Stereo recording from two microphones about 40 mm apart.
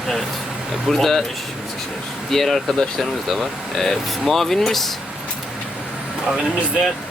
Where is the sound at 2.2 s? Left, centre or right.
Centre.